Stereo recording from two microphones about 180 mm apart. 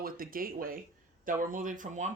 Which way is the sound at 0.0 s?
55° right (ahead or behind).